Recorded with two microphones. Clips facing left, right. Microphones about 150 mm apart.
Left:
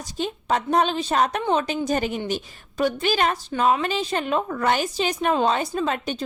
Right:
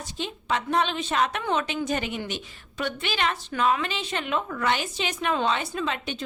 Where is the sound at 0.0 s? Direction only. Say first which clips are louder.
Left 5 dB; 40° left (ahead or behind).